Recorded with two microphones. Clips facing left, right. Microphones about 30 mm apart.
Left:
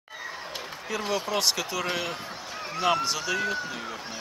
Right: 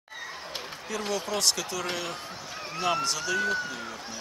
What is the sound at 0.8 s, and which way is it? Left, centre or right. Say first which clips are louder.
Speech: left 2 dB; centre.